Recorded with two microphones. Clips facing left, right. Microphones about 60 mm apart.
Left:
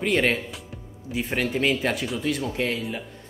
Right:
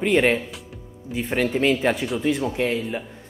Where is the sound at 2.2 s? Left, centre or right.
Centre.